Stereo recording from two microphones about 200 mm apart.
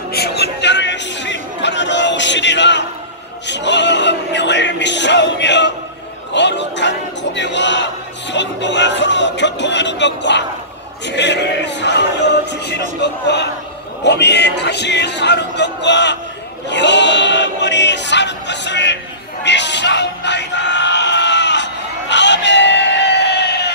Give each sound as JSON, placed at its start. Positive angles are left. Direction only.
{"t": 0.1, "sound": "a sound", "side_deg": 55}
{"t": 6.3, "sound": "speech", "side_deg": 60}
{"t": 16.6, "sound": "choir", "side_deg": 60}
{"t": 19.4, "sound": "bellow", "side_deg": 60}
{"t": 22.1, "sound": "crowd", "side_deg": 60}